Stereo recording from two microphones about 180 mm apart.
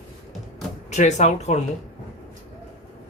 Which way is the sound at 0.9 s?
40° left (ahead or behind).